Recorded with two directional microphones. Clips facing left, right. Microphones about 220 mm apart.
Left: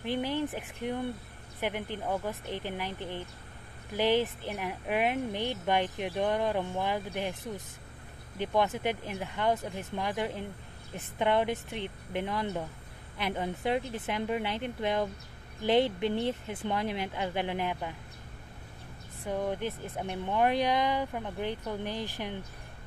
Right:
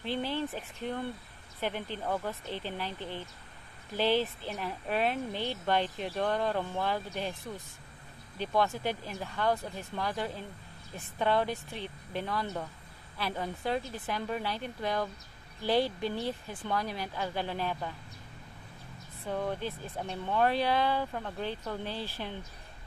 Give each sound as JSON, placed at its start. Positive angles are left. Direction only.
{"t": 0.0, "sound": "speech", "side_deg": 15}
{"t": 19.2, "sound": "speech", "side_deg": 15}